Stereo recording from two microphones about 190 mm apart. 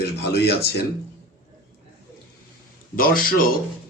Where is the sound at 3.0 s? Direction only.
50° left (ahead or behind).